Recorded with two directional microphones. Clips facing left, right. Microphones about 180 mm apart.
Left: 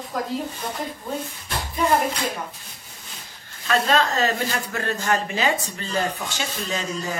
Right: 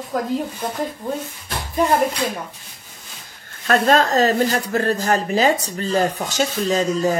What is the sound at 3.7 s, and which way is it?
Speech, 45° right (ahead or behind).